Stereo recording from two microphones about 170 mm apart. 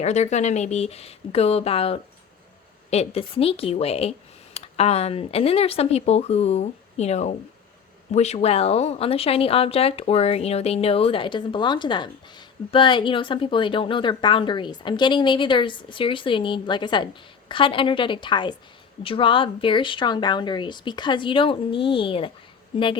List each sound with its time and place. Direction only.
0.0 s speech: 40° left (ahead or behind)